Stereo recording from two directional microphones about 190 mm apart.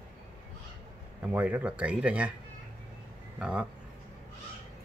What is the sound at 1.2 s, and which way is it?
A man's voice, 5° right (ahead or behind).